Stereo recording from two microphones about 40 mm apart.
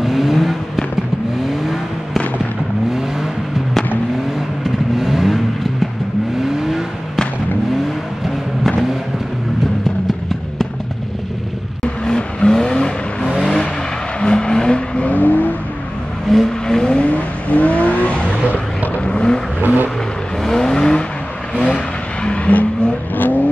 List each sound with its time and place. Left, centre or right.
0.0 s vehicle: centre
4.6 s vehicle: centre
6.4 s vehicle: centre
11.8 s vehicle: left
15.0 s vehicle: left
16.3 s vehicle: centre
17.0 s vehicle: left
19.0 s vehicle: left
19.6 s vehicle: right
20.4 s vehicle: centre
22.5 s vehicle: left